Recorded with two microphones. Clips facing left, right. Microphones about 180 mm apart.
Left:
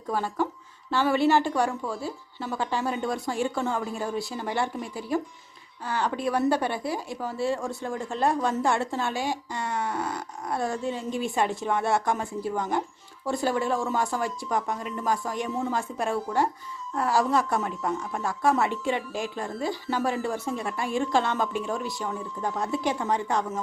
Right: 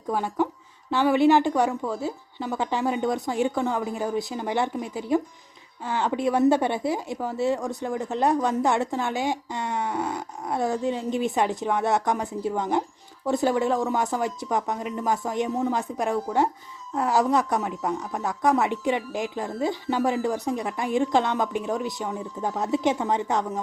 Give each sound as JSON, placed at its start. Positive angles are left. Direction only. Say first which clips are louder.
{"t": 0.1, "sound": "a woman's voice", "louder": "right 2 dB", "side_deg": -15}